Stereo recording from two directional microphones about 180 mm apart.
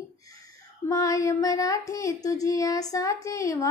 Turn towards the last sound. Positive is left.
turn(degrees=15)  # may be behind; listen again after turning